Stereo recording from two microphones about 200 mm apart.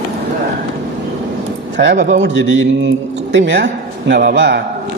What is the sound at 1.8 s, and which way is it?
A woman's voice, 60° right (ahead or behind).